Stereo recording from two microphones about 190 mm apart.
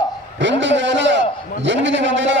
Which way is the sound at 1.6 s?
75° right (ahead or behind).